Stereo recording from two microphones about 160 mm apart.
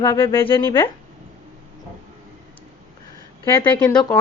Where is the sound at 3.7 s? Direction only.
10° left (ahead or behind).